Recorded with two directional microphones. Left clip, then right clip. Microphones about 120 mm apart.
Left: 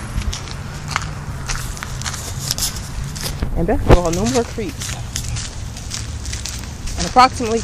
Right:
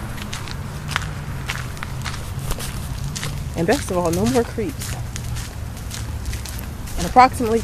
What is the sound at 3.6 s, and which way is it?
Speech, 5° right (ahead or behind).